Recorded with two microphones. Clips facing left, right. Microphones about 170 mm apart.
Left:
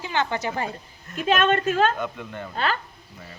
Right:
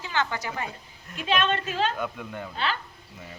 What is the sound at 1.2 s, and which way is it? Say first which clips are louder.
Speech: left 5 dB; 50° left (ahead or behind).